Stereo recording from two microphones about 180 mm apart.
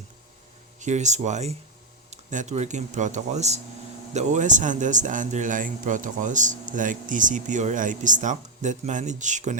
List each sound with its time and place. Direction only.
0.8 s speech: 40° right (ahead or behind)